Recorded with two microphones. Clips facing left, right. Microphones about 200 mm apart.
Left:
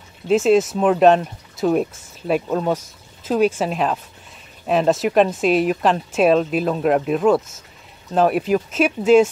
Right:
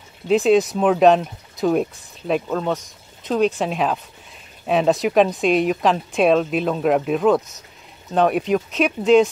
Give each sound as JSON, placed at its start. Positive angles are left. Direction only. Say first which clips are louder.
{"t": 0.3, "sound": "speech", "louder": "even", "side_deg": 0}